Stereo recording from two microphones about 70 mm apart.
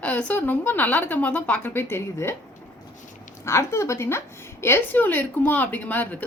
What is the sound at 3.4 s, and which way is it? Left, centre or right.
A woman's voice, left.